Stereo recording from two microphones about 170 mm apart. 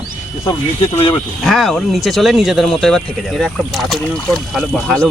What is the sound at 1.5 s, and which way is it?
Speech, centre (ahead or behind).